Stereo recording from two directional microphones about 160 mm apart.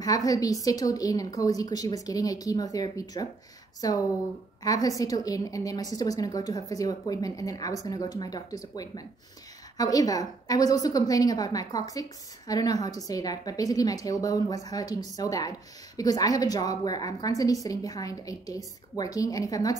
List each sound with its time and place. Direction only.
0.0 s a woman's voice: 20° left (ahead or behind)